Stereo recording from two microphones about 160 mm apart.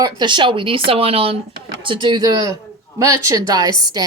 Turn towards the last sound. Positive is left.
turn(degrees=-25)  # may be behind; listen again after turning